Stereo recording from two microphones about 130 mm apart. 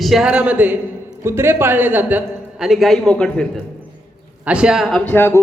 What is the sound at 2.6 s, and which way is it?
Speech, centre (ahead or behind).